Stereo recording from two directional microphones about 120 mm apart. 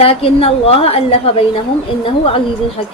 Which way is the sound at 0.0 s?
55° left (ahead or behind).